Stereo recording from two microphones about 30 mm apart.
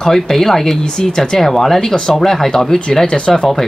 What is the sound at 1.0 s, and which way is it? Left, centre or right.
Speech, left.